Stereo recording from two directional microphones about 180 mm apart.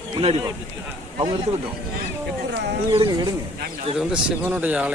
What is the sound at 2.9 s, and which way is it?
Speech, 30° right (ahead or behind).